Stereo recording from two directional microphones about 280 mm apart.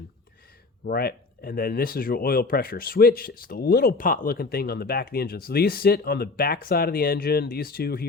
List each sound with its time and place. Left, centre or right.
0.9 s speech: left